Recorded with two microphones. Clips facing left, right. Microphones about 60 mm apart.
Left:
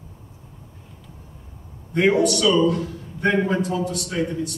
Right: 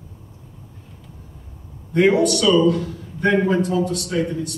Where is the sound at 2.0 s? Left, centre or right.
Right.